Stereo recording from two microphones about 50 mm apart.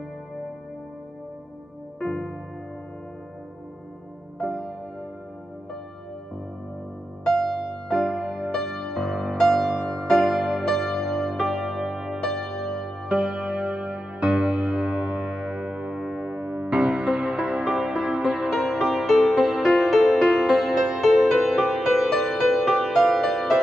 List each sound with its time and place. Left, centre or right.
2.0 s music: centre
4.5 s music: centre
7.2 s music: centre
8.5 s music: centre
10.6 s music: centre
12.2 s music: centre
13.1 s music: centre
22.1 s music: centre